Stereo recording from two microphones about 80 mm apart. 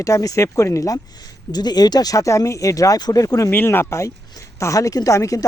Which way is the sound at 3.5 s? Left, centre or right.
Left.